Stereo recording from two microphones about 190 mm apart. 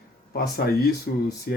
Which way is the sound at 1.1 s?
50° left (ahead or behind).